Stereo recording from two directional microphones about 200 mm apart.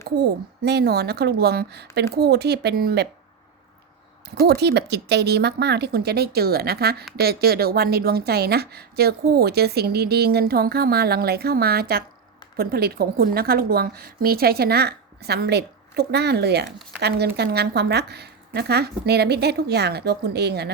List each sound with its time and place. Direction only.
0.2 s a woman's voice: 55° right (ahead or behind)
4.4 s a woman's voice: 55° right (ahead or behind)
16.6 s speech: centre (ahead or behind)
17.0 s speech: 55° right (ahead or behind)